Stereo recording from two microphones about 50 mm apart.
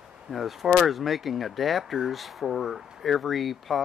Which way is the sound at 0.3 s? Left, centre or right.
Centre.